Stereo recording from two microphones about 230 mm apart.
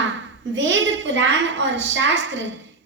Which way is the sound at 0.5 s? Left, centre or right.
Right.